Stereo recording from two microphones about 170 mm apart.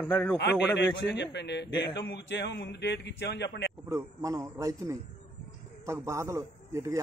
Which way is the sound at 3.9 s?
20° right (ahead or behind).